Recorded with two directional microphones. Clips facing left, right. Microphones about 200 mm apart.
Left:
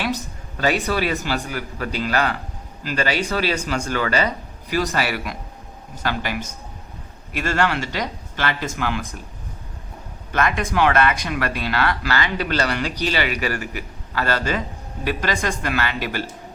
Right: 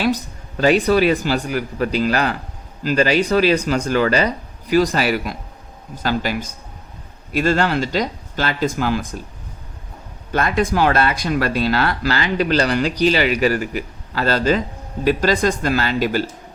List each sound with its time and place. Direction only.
0.7 s speech: 35° right (ahead or behind)
7.3 s speech: 35° right (ahead or behind)
10.3 s speech: 35° right (ahead or behind)
13.2 s a man's voice: 25° right (ahead or behind)